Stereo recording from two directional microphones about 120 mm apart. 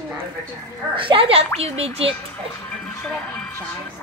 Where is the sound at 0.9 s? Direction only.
45° right (ahead or behind).